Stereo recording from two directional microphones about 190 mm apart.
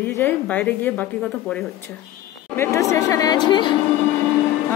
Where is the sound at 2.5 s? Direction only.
15° left (ahead or behind).